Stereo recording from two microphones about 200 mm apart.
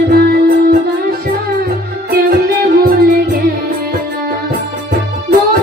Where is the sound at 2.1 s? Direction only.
50° right (ahead or behind).